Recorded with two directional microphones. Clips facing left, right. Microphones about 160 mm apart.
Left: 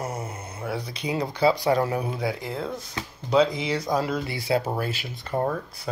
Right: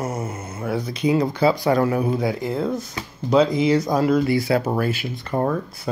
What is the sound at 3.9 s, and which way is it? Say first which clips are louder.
Speech: right 8 dB; 50° right (ahead or behind).